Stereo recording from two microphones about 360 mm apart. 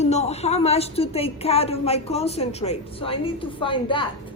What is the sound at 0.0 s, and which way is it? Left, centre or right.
A woman's voice, centre.